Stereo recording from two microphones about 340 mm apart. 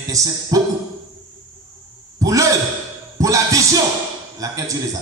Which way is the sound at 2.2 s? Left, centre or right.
Centre.